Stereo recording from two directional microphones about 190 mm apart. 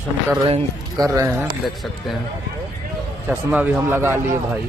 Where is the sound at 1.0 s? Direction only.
15° right (ahead or behind).